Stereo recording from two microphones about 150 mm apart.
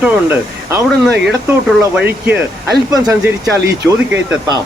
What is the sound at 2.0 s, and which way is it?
Speech, 15° right (ahead or behind).